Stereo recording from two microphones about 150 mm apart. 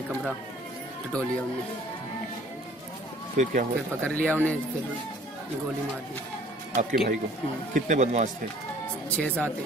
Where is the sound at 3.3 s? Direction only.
55° right (ahead or behind).